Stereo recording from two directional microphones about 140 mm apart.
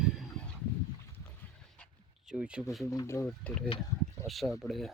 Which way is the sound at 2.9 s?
20° left (ahead or behind).